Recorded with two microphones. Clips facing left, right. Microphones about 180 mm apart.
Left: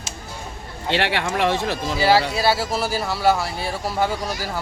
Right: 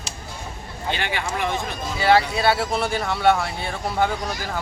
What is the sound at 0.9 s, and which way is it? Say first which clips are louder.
Speech: left 5 dB; 70° left (ahead or behind).